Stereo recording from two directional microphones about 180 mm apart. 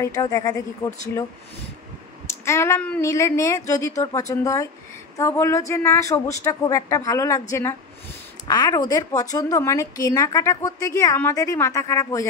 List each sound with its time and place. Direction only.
0.0 s a woman's voice: 20° left (ahead or behind)
2.4 s a woman's voice: 15° left (ahead or behind)
8.5 s a woman's voice: 20° left (ahead or behind)